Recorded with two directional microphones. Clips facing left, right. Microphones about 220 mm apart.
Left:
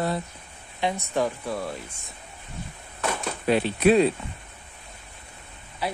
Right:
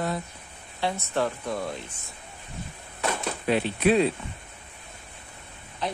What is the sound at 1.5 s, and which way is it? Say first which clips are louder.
Speech: even; centre (ahead or behind).